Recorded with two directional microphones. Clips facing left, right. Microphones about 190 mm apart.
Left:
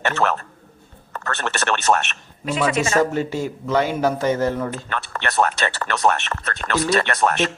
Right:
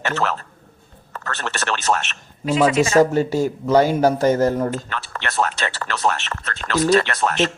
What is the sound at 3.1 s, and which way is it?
Speech, 40° right (ahead or behind).